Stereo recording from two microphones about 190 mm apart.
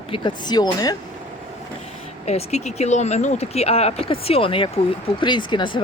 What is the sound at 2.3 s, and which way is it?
Speech, 35° left (ahead or behind).